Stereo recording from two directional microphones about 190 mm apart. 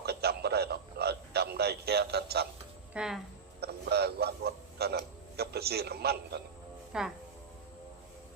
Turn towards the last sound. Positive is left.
turn(degrees=-5)  # may be behind; listen again after turning